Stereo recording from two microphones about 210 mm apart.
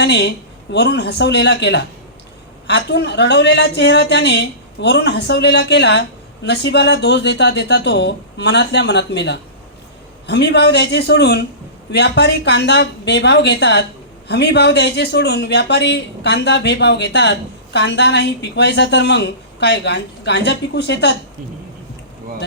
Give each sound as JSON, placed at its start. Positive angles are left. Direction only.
{"t": 0.0, "sound": "a man's voice", "side_deg": 55}